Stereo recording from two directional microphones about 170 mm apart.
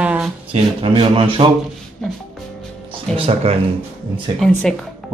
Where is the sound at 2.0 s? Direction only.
5° left (ahead or behind).